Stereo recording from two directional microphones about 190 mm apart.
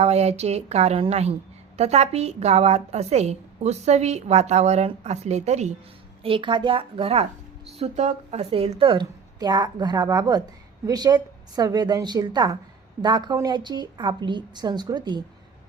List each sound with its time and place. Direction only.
0.0 s a woman's voice: 35° right (ahead or behind)